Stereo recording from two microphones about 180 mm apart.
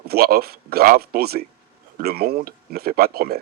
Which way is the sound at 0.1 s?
60° right (ahead or behind).